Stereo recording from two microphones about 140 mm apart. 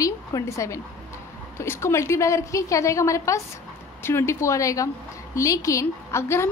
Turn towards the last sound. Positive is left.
turn(degrees=20)  # may be behind; listen again after turning